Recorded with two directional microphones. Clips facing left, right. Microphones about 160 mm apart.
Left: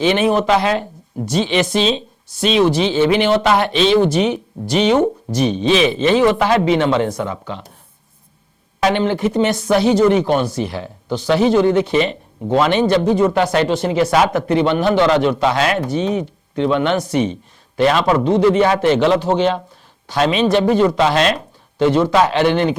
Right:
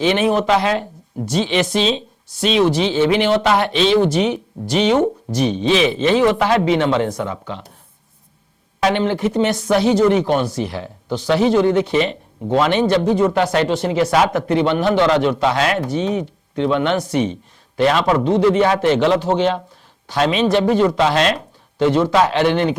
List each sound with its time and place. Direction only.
0.0 s speech: 10° left (ahead or behind)
8.8 s speech: 10° left (ahead or behind)